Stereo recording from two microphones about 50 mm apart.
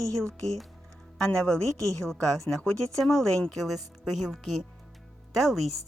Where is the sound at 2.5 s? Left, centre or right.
Left.